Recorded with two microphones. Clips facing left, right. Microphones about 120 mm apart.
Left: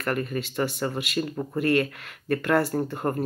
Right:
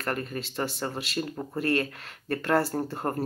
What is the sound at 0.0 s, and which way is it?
Speech, 30° right (ahead or behind).